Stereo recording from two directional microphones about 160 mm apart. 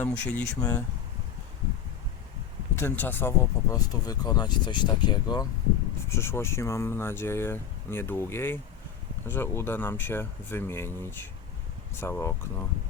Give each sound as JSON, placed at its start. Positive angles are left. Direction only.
{"t": 0.0, "sound": "speech", "side_deg": 10}
{"t": 2.7, "sound": "speech", "side_deg": 15}
{"t": 6.1, "sound": "speech", "side_deg": 15}